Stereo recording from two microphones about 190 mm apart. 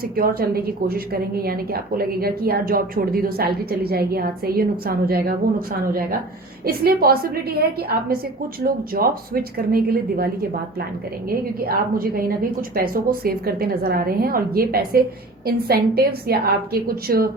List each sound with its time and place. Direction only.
0.2 s a woman's voice: 50° right (ahead or behind)
11.3 s a woman's voice: 50° right (ahead or behind)